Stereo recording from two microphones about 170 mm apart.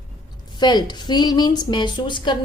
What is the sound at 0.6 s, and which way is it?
A woman's voice, 25° left (ahead or behind).